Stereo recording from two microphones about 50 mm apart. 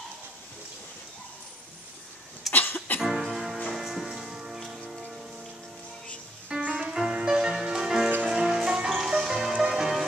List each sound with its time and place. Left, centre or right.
2.5 s music: left
3.0 s music: centre
6.6 s music: centre